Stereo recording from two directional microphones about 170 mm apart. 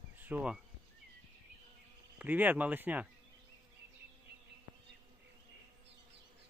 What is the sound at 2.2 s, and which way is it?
Speech, 10° right (ahead or behind).